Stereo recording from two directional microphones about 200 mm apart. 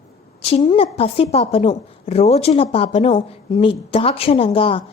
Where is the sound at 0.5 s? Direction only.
30° left (ahead or behind).